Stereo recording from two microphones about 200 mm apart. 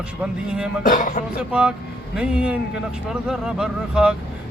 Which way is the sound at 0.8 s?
40° left (ahead or behind).